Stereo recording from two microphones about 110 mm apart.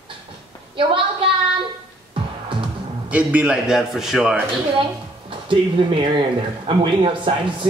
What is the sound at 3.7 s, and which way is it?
Speech, centre (ahead or behind).